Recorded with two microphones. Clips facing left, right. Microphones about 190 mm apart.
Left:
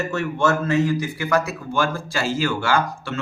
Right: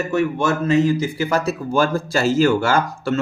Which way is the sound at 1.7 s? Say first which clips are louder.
Right 5 dB; 40° right (ahead or behind).